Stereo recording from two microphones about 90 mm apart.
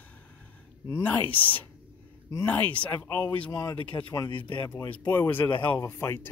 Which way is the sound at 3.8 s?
70° left (ahead or behind).